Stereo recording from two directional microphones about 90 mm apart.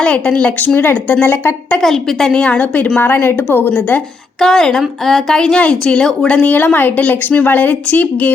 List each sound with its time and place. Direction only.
0.0 s a woman's voice: 15° left (ahead or behind)
1.8 s a woman's voice: 5° left (ahead or behind)
4.4 s a woman's voice: 5° left (ahead or behind)